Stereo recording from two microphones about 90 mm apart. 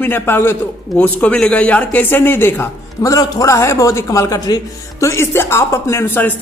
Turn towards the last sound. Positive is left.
turn(degrees=25)  # may be behind; listen again after turning